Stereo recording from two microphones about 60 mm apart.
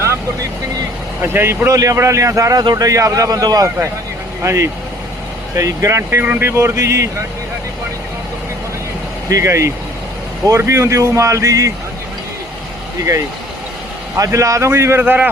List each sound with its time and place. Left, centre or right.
1.2 s speech: right
1.7 s a man's voice: right
4.4 s speech: right
5.5 s speech: right
6.0 s speech: right
6.2 s speech: right
6.6 s speech: right
9.4 s a man's voice: right
14.3 s a man's voice: right
14.7 s speech: right
15.0 s a man's voice: right